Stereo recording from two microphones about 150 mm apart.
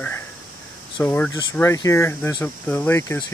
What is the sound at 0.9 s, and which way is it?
Speech, 10° left (ahead or behind).